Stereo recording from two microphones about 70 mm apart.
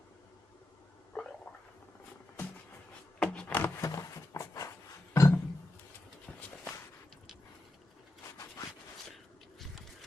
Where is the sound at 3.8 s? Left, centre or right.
Left.